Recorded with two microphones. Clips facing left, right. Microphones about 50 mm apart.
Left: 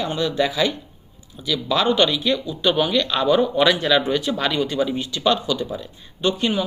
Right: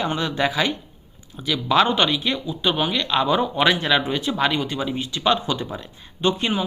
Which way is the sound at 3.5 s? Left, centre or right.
Right.